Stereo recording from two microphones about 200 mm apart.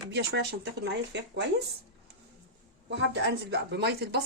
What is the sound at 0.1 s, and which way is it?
Speech, 55° right (ahead or behind).